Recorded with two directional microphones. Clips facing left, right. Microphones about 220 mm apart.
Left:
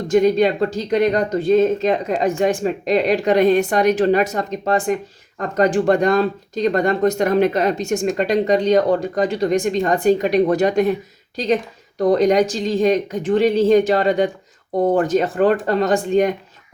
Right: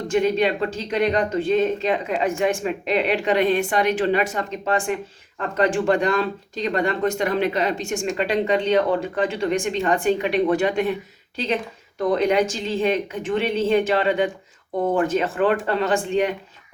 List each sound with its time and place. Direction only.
0.1 s speech: 40° left (ahead or behind)
11.9 s speech: 35° left (ahead or behind)